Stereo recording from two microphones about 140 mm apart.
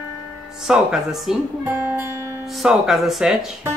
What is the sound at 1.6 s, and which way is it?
Speech, 15° right (ahead or behind).